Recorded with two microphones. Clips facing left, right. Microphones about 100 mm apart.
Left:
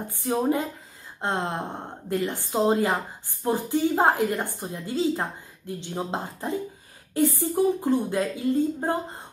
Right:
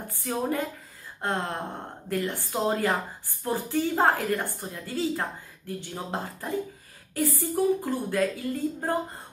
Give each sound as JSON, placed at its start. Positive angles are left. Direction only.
{"t": 0.1, "sound": "a woman's voice", "side_deg": 20}